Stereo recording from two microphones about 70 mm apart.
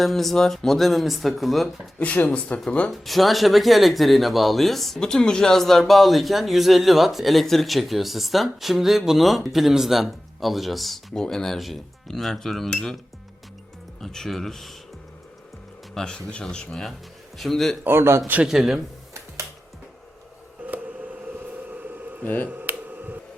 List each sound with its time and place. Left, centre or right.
0.0 s speech: centre
2.0 s speech: left
2.9 s speech: centre
14.0 s speech: centre
16.0 s speech: centre
17.8 s a man's voice: right
18.4 s speech: centre
21.2 s a sound: right
22.2 s speech: left
22.4 s finger snapping: right